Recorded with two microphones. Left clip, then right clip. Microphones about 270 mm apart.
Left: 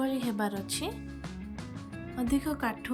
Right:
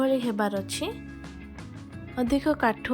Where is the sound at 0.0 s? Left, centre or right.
Centre.